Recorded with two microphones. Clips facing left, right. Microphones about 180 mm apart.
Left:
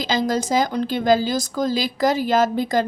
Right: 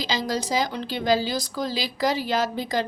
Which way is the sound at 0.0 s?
50° left (ahead or behind).